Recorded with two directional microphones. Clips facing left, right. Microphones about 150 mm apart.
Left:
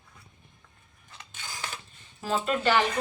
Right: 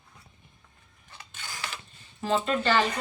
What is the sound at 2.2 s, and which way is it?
Speech, 5° left (ahead or behind).